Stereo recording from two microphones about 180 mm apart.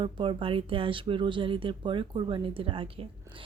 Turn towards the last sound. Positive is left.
turn(degrees=-30)  # may be behind; listen again after turning